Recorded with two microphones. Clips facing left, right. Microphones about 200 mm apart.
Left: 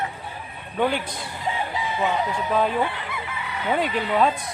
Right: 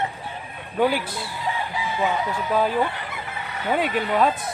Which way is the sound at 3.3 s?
45° right (ahead or behind).